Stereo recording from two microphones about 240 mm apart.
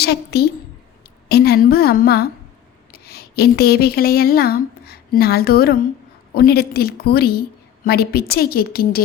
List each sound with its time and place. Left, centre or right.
0.0 s a woman's voice: left